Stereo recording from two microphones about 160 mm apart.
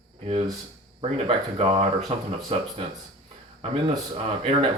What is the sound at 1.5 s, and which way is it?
Speech, 40° right (ahead or behind).